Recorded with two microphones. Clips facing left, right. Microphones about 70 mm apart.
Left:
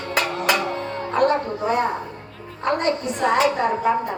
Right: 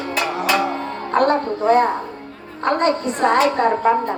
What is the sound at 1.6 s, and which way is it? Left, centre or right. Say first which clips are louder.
Speech: right 6 dB; centre.